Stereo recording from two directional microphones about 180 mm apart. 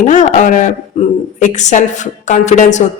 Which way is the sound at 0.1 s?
45° left (ahead or behind).